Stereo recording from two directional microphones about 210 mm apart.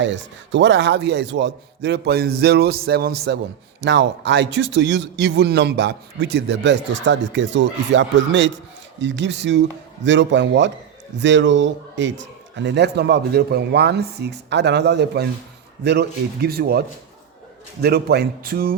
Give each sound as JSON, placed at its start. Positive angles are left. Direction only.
{"t": 0.0, "sound": "a man's voice", "side_deg": -60}